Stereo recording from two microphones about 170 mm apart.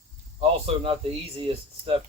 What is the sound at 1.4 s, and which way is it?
Speech, 35° right (ahead or behind).